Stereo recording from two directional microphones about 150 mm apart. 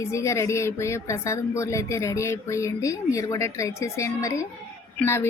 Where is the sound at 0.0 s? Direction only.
20° left (ahead or behind).